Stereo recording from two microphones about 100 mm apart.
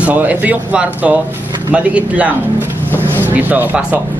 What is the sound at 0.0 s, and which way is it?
Speech, 15° right (ahead or behind).